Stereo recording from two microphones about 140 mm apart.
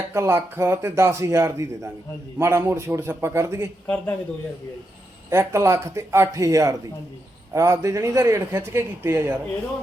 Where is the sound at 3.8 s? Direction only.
10° left (ahead or behind).